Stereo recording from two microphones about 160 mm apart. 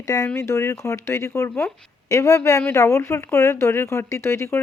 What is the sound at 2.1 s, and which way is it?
Speech, 20° left (ahead or behind).